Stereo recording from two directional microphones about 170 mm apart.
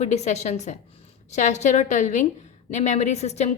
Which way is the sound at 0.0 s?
40° left (ahead or behind).